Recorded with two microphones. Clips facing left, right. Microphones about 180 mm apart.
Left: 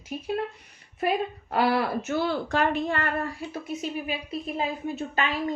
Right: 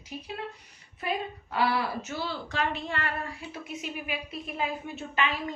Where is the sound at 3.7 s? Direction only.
35° left (ahead or behind).